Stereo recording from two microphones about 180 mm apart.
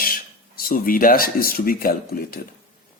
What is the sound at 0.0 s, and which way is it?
A man's voice, 55° left (ahead or behind).